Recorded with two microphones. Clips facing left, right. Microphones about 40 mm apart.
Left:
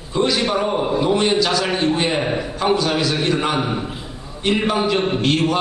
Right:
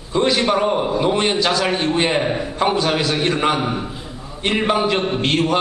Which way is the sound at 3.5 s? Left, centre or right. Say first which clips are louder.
Even; centre.